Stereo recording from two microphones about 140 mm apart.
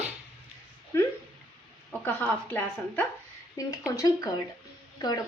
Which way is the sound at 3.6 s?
25° left (ahead or behind).